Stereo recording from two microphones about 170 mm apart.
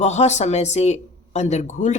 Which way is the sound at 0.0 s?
40° left (ahead or behind).